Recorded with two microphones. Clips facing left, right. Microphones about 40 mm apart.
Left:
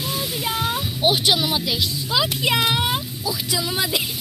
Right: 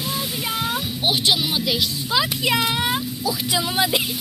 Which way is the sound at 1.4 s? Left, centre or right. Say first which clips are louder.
Left 1 dB; centre.